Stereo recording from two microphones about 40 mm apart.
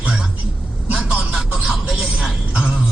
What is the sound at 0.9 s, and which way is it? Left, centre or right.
Vehicle, right.